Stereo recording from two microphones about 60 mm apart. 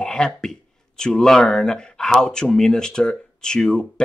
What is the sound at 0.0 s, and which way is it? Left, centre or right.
Speech, centre.